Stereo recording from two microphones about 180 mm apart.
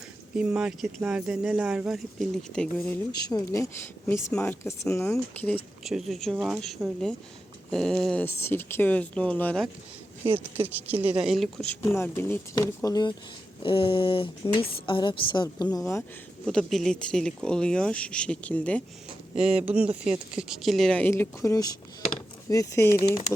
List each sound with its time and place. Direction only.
0.3 s speech: 5° right (ahead or behind)
3.1 s speech: 20° left (ahead or behind)
10.3 s speech: 10° right (ahead or behind); by 16.0 s 15° left (ahead or behind)
16.5 s speech: centre (ahead or behind)
19.4 s speech: 5° right (ahead or behind); by 23.2 s 20° left (ahead or behind)